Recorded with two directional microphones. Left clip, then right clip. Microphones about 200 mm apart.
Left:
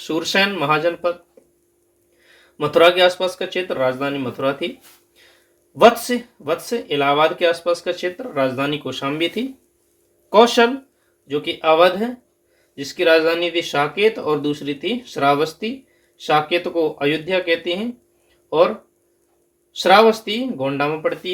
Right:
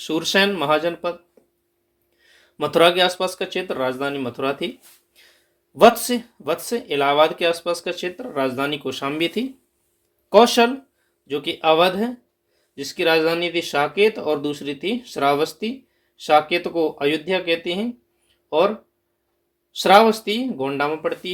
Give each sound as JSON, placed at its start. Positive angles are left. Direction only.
{"t": 0.0, "sound": "speech", "side_deg": -40}
{"t": 2.6, "sound": "speech", "side_deg": -40}
{"t": 6.0, "sound": "speech", "side_deg": -45}
{"t": 19.7, "sound": "speech", "side_deg": -45}